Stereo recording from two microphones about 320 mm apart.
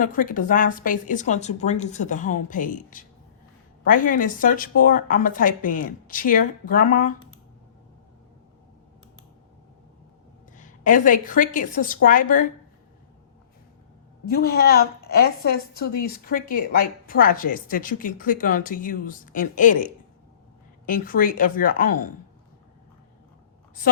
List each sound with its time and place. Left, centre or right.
0.0 s a woman's voice: left
10.5 s a woman's voice: left
14.3 s a woman's voice: left